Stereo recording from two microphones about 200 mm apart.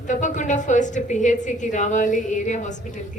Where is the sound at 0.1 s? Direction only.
40° left (ahead or behind).